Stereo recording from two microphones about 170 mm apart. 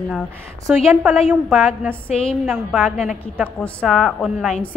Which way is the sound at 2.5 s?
5° right (ahead or behind).